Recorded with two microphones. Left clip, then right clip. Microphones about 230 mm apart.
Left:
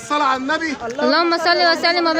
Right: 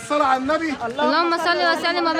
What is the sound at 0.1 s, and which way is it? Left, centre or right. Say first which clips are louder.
Speech: left 1 dB; centre.